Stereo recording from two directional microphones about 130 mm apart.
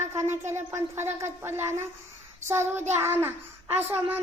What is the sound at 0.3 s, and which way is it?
A child's voice, 20° right (ahead or behind).